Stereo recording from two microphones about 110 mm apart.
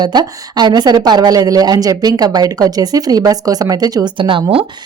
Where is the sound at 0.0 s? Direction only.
40° right (ahead or behind).